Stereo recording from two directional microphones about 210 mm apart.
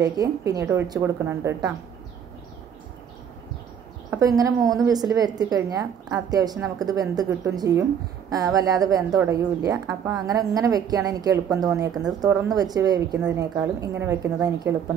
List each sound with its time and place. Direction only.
0.0 s a woman's voice: 15° right (ahead or behind)
4.1 s a woman's voice: 15° right (ahead or behind)